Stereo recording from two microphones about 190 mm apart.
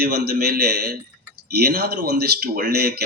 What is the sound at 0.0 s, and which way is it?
Speech, 55° right (ahead or behind).